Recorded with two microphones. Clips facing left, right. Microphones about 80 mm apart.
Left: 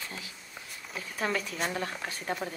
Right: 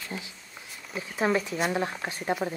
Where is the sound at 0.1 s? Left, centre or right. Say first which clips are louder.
Right 4 dB; right.